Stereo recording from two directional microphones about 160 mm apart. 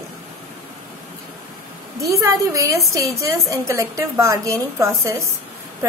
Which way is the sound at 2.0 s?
20° right (ahead or behind).